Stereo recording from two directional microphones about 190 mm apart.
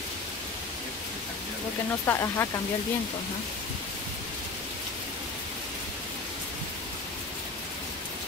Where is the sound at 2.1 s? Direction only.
15° left (ahead or behind).